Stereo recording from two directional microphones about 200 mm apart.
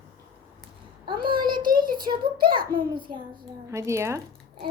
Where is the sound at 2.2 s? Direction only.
50° right (ahead or behind).